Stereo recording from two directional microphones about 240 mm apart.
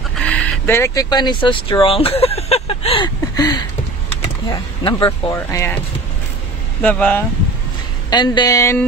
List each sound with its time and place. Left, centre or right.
0.1 s a sound: centre
4.2 s speech: centre
6.8 s speech: centre
8.1 s speech: centre